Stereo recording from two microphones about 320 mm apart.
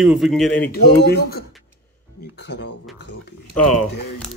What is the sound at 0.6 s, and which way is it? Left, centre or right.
Speech, left.